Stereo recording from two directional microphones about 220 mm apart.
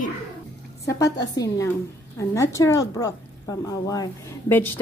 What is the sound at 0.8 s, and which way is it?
A woman's voice, 15° left (ahead or behind).